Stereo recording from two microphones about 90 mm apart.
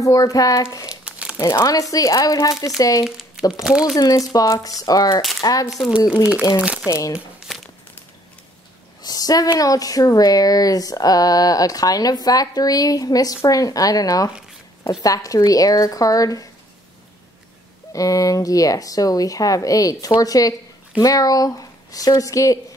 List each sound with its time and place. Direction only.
0.0 s speech: 40° left (ahead or behind)
0.8 s crumpling: 15° right (ahead or behind)
1.4 s speech: 40° left (ahead or behind)
3.0 s crumpling: 5° right (ahead or behind)
3.6 s speech: 5° right (ahead or behind)
3.9 s speech: 40° left (ahead or behind)
5.7 s speech: centre (ahead or behind)
6.6 s speech: 15° right (ahead or behind)
6.9 s speech: 35° left (ahead or behind)
7.4 s crumpling: centre (ahead or behind)
9.0 s speech: 45° left (ahead or behind)
17.9 s speech: 40° left (ahead or behind)